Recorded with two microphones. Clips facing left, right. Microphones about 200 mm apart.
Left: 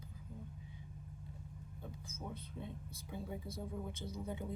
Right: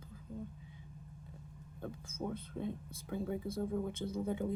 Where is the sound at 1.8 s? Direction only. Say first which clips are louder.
Right 8 dB; 55° right (ahead or behind).